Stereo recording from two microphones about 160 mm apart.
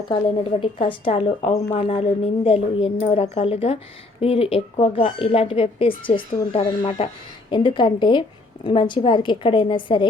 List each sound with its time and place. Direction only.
0.1 s a woman's voice: 30° left (ahead or behind)
7.5 s a woman's voice: 30° left (ahead or behind)